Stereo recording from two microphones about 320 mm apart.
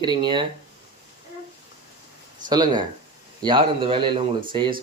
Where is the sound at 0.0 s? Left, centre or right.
Centre.